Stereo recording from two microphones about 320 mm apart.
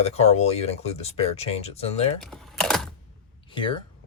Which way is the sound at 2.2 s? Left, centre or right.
Centre.